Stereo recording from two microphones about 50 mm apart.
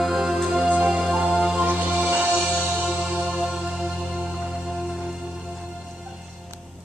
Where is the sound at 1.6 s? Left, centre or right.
Right.